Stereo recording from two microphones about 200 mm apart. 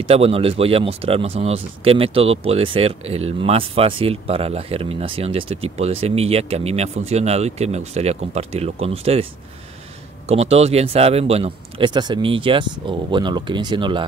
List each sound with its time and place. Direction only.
0.0 s speech: 30° right (ahead or behind)